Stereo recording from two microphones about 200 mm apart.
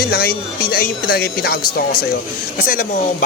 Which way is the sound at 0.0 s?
50° left (ahead or behind).